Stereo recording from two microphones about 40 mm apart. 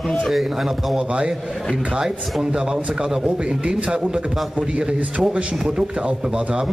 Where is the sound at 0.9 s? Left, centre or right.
Right.